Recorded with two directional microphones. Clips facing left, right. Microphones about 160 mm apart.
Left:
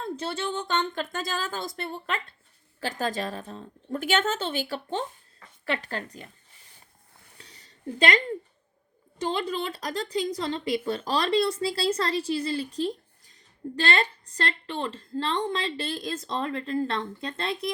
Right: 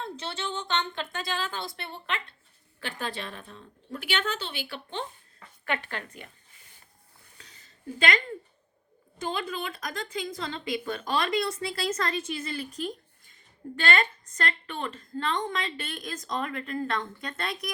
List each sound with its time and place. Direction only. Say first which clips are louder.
0.0 s a woman's voice: left 4 dB; 50° left (ahead or behind)
7.3 s a sound: left 4 dB; 35° left (ahead or behind)
9.1 s a woman's voice: left 4 dB; 35° left (ahead or behind)